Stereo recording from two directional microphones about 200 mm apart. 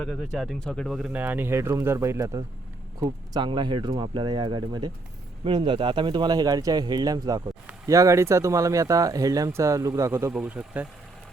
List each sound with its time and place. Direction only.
0.0 s a man's voice: centre (ahead or behind)